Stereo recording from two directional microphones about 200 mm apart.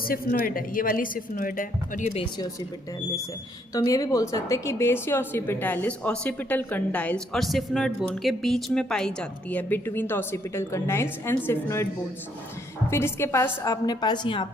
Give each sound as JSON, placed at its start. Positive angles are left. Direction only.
{"t": 0.0, "sound": "speech", "side_deg": 45}
{"t": 3.8, "sound": "a woman's voice", "side_deg": 15}
{"t": 12.9, "sound": "a woman's voice", "side_deg": 10}